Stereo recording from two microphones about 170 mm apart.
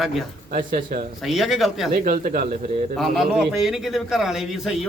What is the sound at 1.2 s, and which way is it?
Speech, centre (ahead or behind).